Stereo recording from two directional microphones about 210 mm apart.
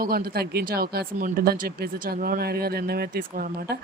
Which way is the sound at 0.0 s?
45° right (ahead or behind).